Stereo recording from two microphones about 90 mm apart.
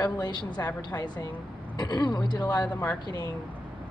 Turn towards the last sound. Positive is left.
turn(degrees=50)  # may be behind; listen again after turning